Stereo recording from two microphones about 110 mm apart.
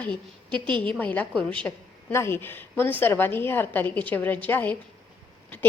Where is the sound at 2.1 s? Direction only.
25° left (ahead or behind).